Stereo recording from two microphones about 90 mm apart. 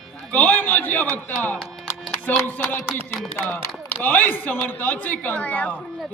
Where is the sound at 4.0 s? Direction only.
20° left (ahead or behind).